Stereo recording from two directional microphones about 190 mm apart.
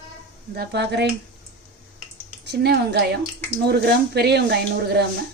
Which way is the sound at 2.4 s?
60° right (ahead or behind).